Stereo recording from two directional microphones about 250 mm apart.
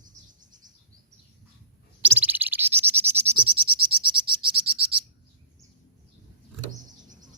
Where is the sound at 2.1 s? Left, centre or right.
Centre.